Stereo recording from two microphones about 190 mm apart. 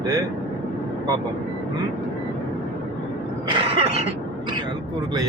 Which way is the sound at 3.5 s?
25° right (ahead or behind).